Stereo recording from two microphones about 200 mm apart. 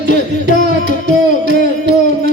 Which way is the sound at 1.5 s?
40° left (ahead or behind).